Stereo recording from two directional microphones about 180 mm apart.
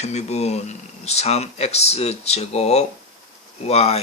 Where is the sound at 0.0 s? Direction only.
35° left (ahead or behind).